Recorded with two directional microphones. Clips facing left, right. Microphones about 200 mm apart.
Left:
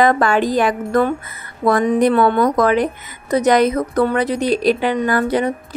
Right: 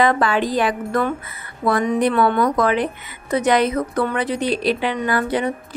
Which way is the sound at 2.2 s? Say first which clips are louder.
Left 3 dB; 45° left (ahead or behind).